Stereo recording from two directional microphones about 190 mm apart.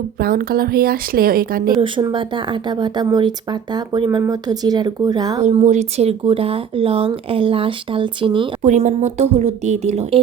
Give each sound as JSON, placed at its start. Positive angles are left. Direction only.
{"t": 0.2, "sound": "a woman's voice", "side_deg": -50}
{"t": 1.8, "sound": "speech", "side_deg": -20}
{"t": 5.5, "sound": "speech", "side_deg": -35}
{"t": 8.7, "sound": "speech", "side_deg": -40}